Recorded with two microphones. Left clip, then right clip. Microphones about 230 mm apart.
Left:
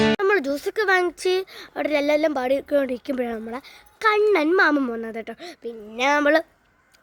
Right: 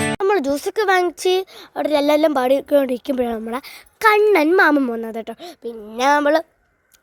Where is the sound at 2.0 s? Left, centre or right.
Right.